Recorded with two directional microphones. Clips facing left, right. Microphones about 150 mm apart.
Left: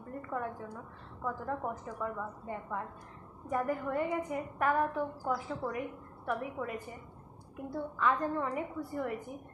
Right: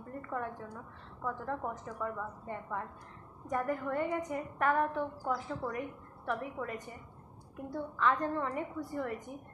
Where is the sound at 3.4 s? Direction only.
5° left (ahead or behind).